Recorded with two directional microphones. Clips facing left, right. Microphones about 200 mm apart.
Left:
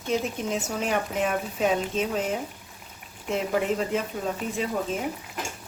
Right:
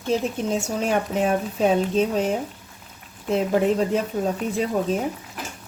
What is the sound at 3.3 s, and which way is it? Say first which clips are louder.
Speech: right 5 dB; 35° right (ahead or behind).